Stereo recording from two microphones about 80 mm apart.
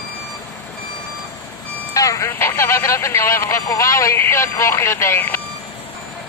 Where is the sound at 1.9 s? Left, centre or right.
Left.